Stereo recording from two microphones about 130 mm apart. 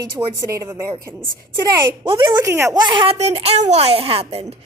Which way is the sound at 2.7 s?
35° right (ahead or behind).